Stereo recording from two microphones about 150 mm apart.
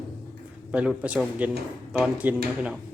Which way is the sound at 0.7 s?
10° right (ahead or behind).